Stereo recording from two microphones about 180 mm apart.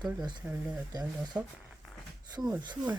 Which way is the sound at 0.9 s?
25° right (ahead or behind).